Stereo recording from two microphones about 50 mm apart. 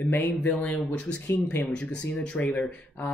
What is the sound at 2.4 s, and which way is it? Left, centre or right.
Speech, left.